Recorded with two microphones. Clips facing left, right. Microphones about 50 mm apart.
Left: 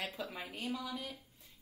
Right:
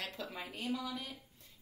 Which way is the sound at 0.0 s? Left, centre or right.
Centre.